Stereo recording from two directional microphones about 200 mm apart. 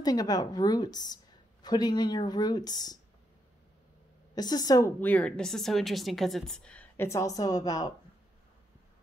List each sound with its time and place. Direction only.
0.0 s a woman's voice: 20° left (ahead or behind)
4.4 s speech: 20° left (ahead or behind)